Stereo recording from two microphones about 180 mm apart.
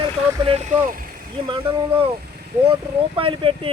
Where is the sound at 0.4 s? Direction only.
35° right (ahead or behind).